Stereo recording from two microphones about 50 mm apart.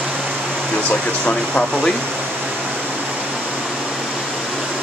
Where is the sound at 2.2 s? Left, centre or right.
Centre.